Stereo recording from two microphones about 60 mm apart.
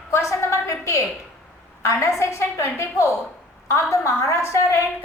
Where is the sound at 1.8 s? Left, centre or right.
Left.